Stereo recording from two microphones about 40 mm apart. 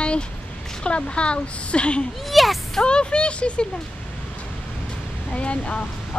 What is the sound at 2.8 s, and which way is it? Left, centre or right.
Speech, left.